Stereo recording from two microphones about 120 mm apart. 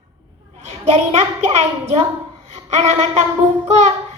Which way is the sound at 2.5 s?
70° right (ahead or behind).